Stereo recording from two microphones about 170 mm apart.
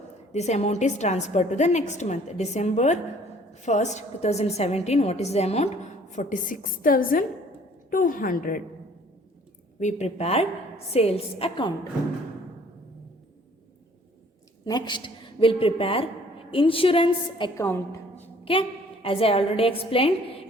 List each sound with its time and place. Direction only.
0.3 s a woman's voice: 40° left (ahead or behind)
9.8 s a woman's voice: 40° left (ahead or behind)
14.6 s a woman's voice: 25° left (ahead or behind)
19.0 s a woman's voice: 35° left (ahead or behind)